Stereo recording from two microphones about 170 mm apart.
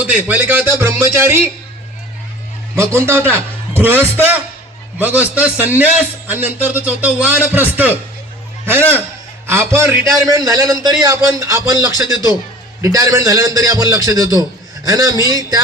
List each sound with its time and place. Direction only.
0.0 s a man's voice: 10° right (ahead or behind)
2.7 s a man's voice: 15° right (ahead or behind)